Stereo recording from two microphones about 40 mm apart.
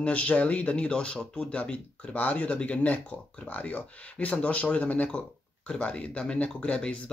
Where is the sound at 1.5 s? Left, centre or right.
Left.